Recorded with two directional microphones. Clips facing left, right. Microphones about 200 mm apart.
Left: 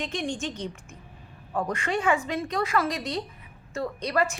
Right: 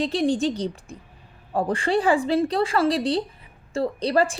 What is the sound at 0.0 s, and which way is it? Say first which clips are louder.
A woman's voice: right 9 dB; 35° right (ahead or behind).